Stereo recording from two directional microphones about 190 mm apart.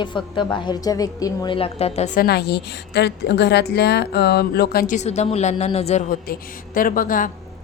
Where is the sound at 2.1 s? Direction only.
55° left (ahead or behind).